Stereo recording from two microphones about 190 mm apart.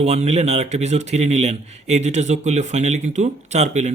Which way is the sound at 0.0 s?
35° right (ahead or behind).